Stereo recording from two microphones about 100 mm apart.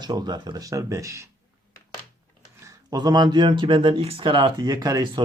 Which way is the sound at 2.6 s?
40° right (ahead or behind).